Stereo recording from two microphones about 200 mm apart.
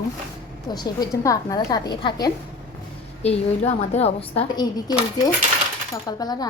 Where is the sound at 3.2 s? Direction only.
30° left (ahead or behind).